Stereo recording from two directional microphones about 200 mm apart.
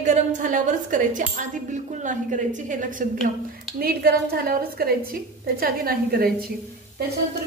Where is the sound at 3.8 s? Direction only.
50° right (ahead or behind).